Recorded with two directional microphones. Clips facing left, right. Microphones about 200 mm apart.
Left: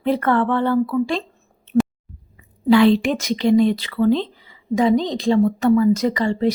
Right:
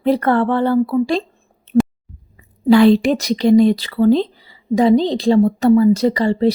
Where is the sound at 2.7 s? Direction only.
40° right (ahead or behind).